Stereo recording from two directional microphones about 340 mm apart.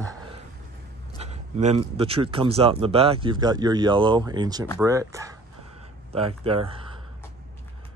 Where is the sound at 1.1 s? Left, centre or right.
Centre.